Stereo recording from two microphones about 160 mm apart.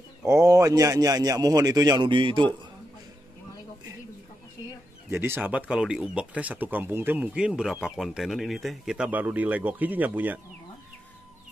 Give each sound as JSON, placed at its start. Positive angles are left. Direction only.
{"t": 0.2, "sound": "a man's voice", "side_deg": -20}
{"t": 5.1, "sound": "speech", "side_deg": -15}